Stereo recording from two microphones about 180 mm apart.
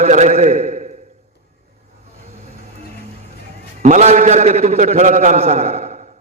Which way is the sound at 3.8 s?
45° right (ahead or behind).